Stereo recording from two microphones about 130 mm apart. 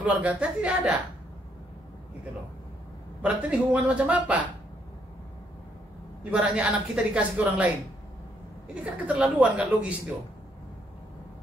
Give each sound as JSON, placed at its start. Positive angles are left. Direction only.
{"t": 0.0, "sound": "a woman's voice", "side_deg": -10}
{"t": 3.2, "sound": "a woman's voice", "side_deg": -10}
{"t": 6.3, "sound": "a woman's voice", "side_deg": -10}
{"t": 8.8, "sound": "a woman's voice", "side_deg": -10}